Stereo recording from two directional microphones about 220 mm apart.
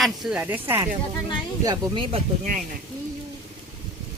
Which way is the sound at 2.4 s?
35° right (ahead or behind).